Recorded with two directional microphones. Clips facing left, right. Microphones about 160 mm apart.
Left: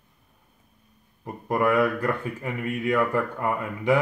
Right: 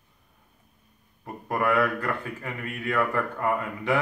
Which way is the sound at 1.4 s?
20° left (ahead or behind).